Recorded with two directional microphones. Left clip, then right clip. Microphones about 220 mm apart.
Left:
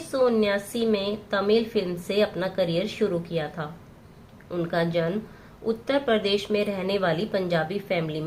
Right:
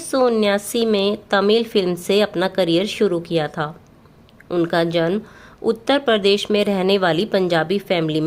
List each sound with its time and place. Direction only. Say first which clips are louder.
0.1 s a woman's voice: right 5 dB; 45° right (ahead or behind)